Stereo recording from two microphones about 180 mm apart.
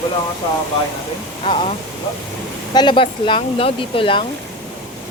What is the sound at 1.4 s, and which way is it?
Speech, 30° left (ahead or behind).